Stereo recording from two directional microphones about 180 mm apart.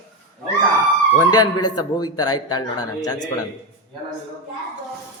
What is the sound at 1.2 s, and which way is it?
Speech, 20° left (ahead or behind).